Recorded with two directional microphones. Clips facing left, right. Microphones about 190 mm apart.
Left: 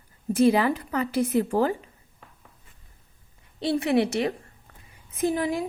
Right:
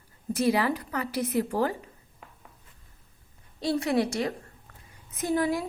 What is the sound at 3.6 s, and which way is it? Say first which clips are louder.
Speech: left 3 dB; 25° left (ahead or behind).